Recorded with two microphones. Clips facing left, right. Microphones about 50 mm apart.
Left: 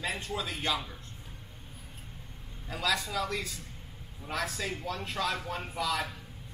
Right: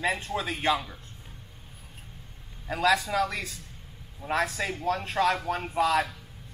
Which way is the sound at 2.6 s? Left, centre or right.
Right.